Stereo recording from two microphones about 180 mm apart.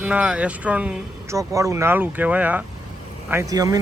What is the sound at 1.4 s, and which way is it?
Speech, 15° right (ahead or behind).